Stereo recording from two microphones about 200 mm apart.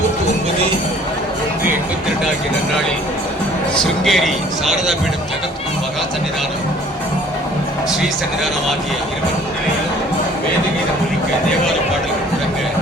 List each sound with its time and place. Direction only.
4.0 s a man's voice: centre (ahead or behind)